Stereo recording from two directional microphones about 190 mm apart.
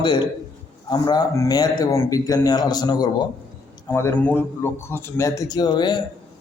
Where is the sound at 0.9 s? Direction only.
20° left (ahead or behind).